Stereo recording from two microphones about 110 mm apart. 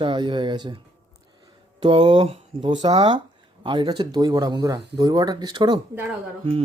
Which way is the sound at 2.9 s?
60° right (ahead or behind).